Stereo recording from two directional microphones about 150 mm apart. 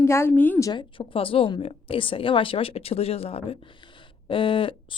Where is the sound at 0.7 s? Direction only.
35° left (ahead or behind).